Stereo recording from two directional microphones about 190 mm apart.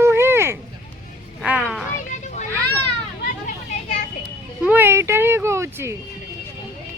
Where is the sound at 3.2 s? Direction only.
45° left (ahead or behind).